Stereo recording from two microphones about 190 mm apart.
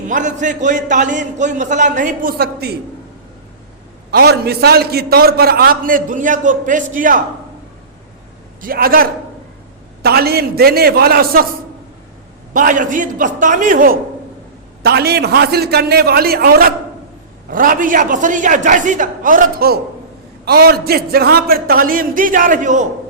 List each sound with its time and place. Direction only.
0.1 s a man's voice: 40° right (ahead or behind)
4.1 s a man's voice: 55° right (ahead or behind)
8.6 s a man's voice: 50° right (ahead or behind)
12.5 s a man's voice: 45° right (ahead or behind)
14.8 s a man's voice: 60° right (ahead or behind); by 22.9 s 40° right (ahead or behind)